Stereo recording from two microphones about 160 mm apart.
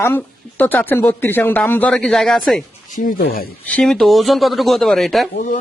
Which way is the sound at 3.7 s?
5° left (ahead or behind).